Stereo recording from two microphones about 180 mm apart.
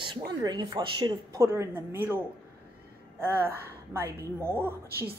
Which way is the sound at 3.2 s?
10° right (ahead or behind).